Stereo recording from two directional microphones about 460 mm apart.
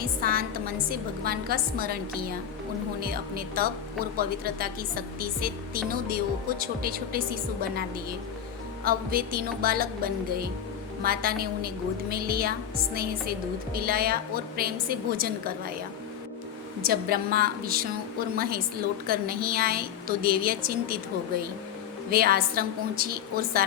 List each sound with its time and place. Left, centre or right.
0.0 s a woman's voice: centre
16.8 s a woman's voice: centre
19.0 s a woman's voice: centre
22.1 s a woman's voice: centre